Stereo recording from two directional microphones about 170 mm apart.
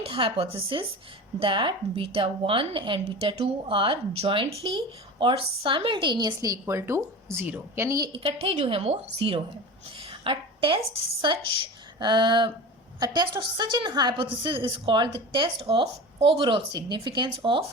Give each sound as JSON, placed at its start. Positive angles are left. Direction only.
{"t": 0.0, "sound": "a woman's voice", "side_deg": -35}
{"t": 10.1, "sound": "a sound", "side_deg": -30}
{"t": 11.2, "sound": "a woman's voice", "side_deg": -30}